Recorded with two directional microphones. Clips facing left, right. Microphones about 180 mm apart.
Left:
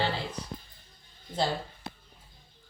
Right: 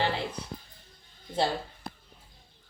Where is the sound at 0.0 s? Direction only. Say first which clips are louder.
Right 1 dB; 15° right (ahead or behind).